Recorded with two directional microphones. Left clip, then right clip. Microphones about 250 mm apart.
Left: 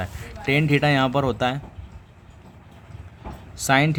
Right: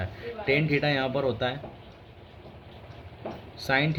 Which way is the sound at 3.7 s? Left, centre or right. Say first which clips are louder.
Left 6 dB; left.